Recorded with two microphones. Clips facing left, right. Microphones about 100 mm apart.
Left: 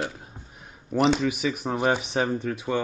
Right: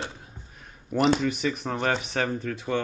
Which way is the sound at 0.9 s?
Centre (ahead or behind).